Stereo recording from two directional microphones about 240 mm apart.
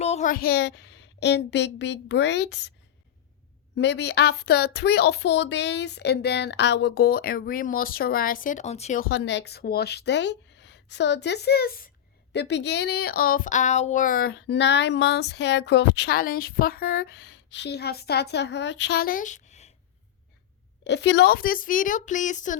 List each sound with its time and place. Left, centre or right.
0.0 s a woman's voice: left
3.8 s speech: left
9.0 s speech: left
20.8 s speech: left